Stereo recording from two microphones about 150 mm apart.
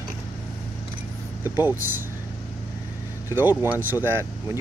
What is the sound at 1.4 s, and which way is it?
Speech, 15° right (ahead or behind).